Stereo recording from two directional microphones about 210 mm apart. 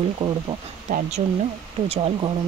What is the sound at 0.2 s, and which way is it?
Speech, 25° right (ahead or behind).